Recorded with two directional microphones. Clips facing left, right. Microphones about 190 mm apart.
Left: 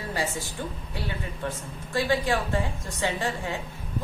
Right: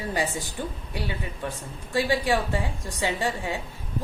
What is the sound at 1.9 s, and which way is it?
A woman's voice, 15° right (ahead or behind).